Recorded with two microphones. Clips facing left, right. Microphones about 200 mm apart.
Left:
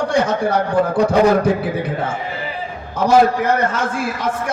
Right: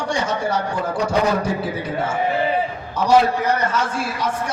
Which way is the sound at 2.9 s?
55° left (ahead or behind).